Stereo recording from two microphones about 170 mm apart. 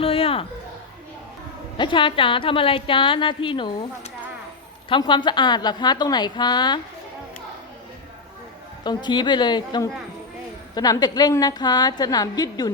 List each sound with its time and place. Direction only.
0.0 s a sound: 35° left (ahead or behind)
1.8 s a woman's voice: 30° left (ahead or behind)
8.8 s a woman's voice: 25° left (ahead or behind)